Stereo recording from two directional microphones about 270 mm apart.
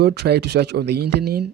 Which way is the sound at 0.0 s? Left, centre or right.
Right.